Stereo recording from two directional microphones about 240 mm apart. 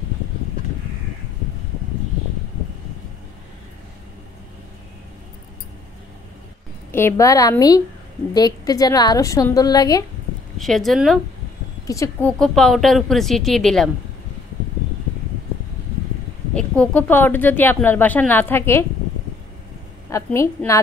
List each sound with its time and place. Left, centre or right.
6.9 s speech: centre
10.6 s speech: centre
11.8 s speech: centre
16.5 s speech: centre
20.1 s speech: centre